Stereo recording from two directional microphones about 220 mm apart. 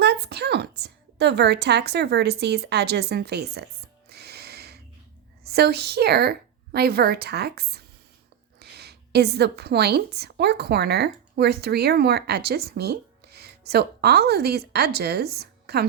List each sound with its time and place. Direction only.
0.0 s a woman's voice: 50° right (ahead or behind)
4.1 s music: 45° right (ahead or behind)
5.4 s a woman's voice: 45° right (ahead or behind)